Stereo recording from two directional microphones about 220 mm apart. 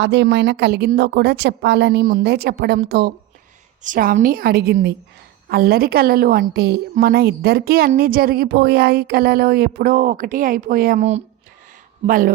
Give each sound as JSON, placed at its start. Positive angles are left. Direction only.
{"t": 0.0, "sound": "a woman's voice", "side_deg": -50}